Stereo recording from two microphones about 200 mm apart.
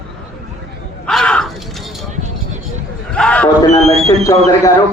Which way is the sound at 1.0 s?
5° left (ahead or behind).